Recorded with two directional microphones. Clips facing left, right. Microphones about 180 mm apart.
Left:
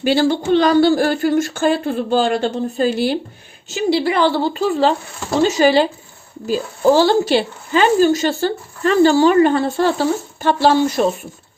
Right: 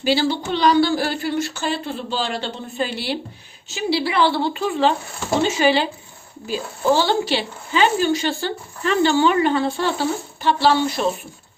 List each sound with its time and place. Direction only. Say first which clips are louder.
0.0 s a woman's voice: left 4 dB; 50° left (ahead or behind)